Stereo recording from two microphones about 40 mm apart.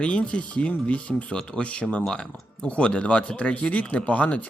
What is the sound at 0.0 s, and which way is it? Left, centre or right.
A man's voice, left.